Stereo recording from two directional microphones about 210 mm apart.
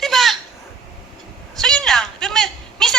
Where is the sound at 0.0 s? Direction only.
Centre (ahead or behind).